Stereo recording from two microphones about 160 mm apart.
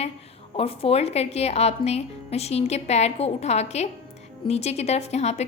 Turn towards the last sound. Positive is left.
turn(degrees=45)  # may be behind; listen again after turning